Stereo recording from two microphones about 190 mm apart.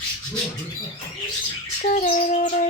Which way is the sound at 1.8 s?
40° left (ahead or behind).